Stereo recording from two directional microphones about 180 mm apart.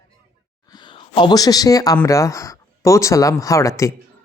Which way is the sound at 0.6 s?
25° left (ahead or behind).